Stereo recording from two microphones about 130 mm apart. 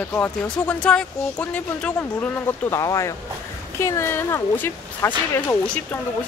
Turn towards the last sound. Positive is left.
turn(degrees=20)  # may be behind; listen again after turning